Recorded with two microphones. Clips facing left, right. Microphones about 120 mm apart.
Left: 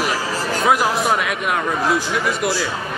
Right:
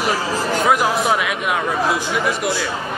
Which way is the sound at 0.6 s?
Centre (ahead or behind).